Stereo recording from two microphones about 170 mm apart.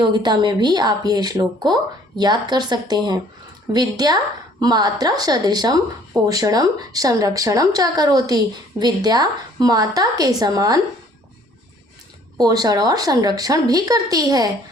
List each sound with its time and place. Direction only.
0.0 s a woman's voice: 25° right (ahead or behind)
12.4 s a woman's voice: 20° right (ahead or behind)